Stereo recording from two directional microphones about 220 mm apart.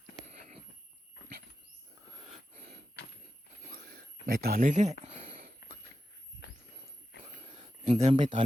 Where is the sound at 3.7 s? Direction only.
45° right (ahead or behind).